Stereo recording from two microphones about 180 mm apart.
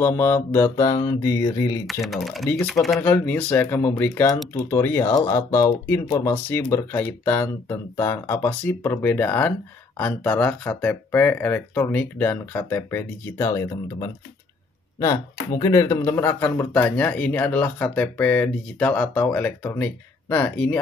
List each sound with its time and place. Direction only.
0.0 s speech: 10° left (ahead or behind)
1.0 s mantra: 15° left (ahead or behind)
1.9 s speech: centre (ahead or behind)
15.0 s speech: 20° left (ahead or behind)